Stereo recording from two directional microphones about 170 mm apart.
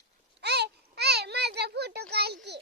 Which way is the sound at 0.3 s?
75° right (ahead or behind).